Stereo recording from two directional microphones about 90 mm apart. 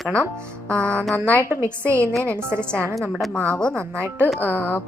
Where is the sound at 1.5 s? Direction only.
25° right (ahead or behind).